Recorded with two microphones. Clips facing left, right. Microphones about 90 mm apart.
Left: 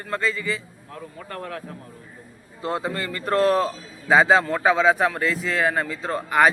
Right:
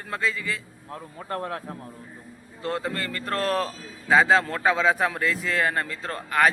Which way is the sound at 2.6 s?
10° left (ahead or behind).